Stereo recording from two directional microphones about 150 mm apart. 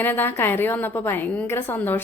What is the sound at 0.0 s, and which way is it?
A woman's voice, 15° left (ahead or behind).